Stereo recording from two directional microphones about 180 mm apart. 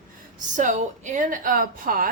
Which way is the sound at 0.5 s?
45° right (ahead or behind).